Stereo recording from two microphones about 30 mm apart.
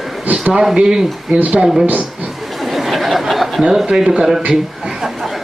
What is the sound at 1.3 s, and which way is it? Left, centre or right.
Speech, right.